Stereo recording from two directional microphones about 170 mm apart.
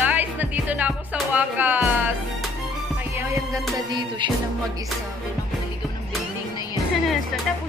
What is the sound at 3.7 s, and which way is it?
Music, 25° right (ahead or behind).